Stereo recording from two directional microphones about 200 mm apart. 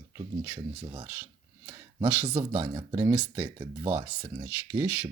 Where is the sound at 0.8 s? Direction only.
20° right (ahead or behind).